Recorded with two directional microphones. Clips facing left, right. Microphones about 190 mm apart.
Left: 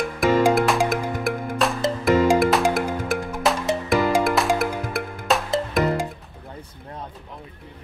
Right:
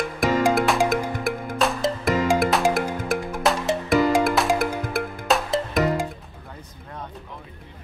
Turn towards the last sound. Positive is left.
turn(degrees=0)  # may be behind; listen again after turning